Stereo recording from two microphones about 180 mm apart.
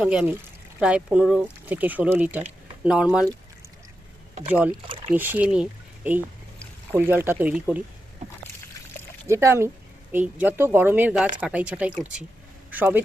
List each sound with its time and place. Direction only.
0.0 s speech: 5° right (ahead or behind)
5.1 s speech: 10° right (ahead or behind)
9.2 s speech: 15° right (ahead or behind)